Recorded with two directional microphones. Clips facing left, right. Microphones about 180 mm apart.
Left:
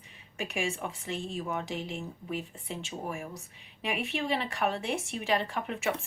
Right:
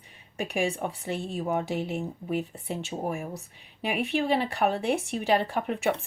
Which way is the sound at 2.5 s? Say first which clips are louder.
Right 5 dB; 35° right (ahead or behind).